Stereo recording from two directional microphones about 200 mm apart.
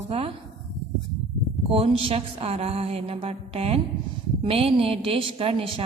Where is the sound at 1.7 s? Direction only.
30° right (ahead or behind).